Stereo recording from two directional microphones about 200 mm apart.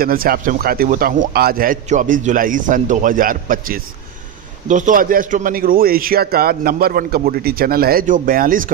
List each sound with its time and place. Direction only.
0.0 s a man's voice: 45° right (ahead or behind)